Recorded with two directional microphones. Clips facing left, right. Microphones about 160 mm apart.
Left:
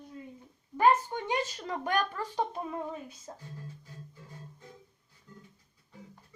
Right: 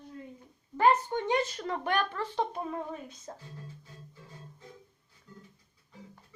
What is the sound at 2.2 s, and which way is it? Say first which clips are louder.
Speech: right 1 dB; 10° left (ahead or behind).